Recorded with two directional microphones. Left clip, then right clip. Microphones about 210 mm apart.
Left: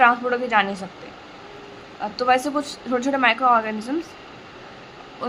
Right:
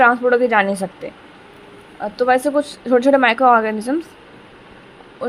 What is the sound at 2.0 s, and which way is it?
Speech, 20° right (ahead or behind).